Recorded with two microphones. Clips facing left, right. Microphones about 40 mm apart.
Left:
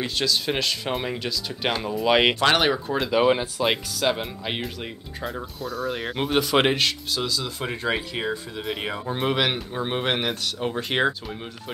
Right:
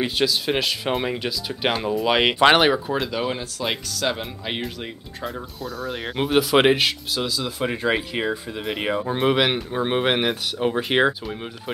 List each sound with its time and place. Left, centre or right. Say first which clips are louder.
0.0 s speech: right 3 dB; centre
2.0 s speech: left 2 dB; centre
2.3 s speech: right 5 dB; centre
2.6 s speech: right 3 dB; centre
3.1 s speech: left 6 dB; centre
3.6 s speech: left 1 dB; centre